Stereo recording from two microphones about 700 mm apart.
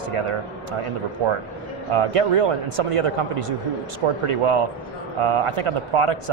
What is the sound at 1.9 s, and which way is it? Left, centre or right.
Speech, right.